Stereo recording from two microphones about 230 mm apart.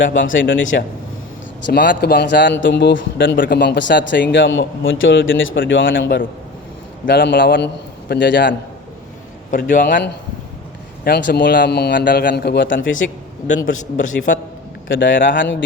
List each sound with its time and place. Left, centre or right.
0.1 s speech: left
1.6 s a man's voice: left
9.5 s a man's voice: left
14.2 s a man's voice: left